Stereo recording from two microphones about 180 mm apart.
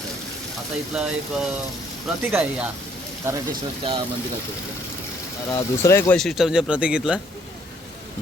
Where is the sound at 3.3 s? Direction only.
15° right (ahead or behind).